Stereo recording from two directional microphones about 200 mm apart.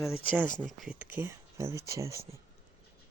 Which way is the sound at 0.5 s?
5° left (ahead or behind).